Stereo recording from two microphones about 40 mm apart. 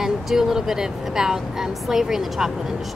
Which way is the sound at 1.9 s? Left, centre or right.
Centre.